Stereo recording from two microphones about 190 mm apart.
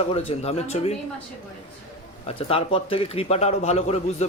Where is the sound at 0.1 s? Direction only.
30° left (ahead or behind).